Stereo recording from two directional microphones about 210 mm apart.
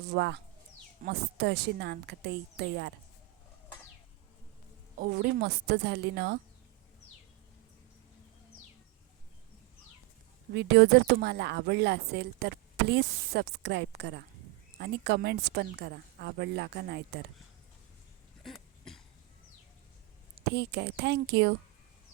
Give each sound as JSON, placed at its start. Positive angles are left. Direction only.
{"t": 0.1, "sound": "speech", "side_deg": -50}
{"t": 4.9, "sound": "speech", "side_deg": -50}
{"t": 10.5, "sound": "speech", "side_deg": -50}
{"t": 18.4, "sound": "cough", "side_deg": 0}
{"t": 20.3, "sound": "speech", "side_deg": -50}